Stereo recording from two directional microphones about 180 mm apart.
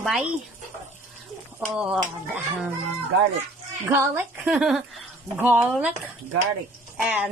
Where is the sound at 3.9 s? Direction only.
10° right (ahead or behind).